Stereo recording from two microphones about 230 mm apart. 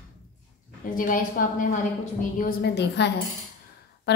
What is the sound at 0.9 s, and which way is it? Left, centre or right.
A woman's voice, left.